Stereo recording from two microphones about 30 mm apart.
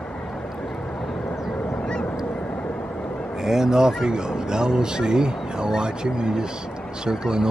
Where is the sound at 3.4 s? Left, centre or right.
Centre.